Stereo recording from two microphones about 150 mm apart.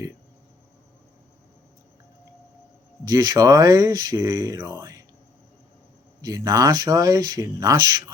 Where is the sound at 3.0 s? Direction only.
25° right (ahead or behind).